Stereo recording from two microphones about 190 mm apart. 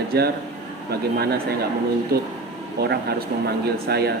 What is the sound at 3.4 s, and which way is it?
Speech, 55° right (ahead or behind).